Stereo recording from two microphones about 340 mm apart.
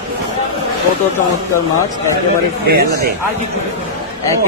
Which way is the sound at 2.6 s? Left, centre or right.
Right.